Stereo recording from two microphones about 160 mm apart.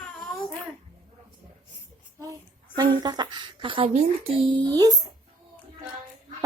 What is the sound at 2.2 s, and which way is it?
A woman's voice, 25° right (ahead or behind).